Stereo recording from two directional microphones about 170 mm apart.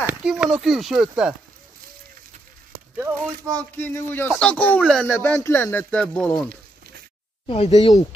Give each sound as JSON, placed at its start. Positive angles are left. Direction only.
{"t": 0.0, "sound": "speech", "side_deg": -5}
{"t": 3.0, "sound": "speech", "side_deg": -10}
{"t": 3.5, "sound": "speech", "side_deg": 10}
{"t": 7.4, "sound": "speech", "side_deg": 35}